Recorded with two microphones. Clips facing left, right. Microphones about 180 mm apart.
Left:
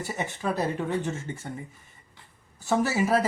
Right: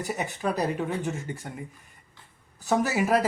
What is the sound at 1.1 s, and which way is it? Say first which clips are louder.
Speech: even; 15° right (ahead or behind).